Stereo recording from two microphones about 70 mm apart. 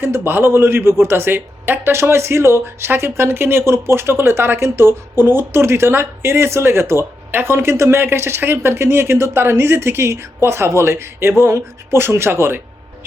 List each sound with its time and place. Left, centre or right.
0.0 s a man's voice: right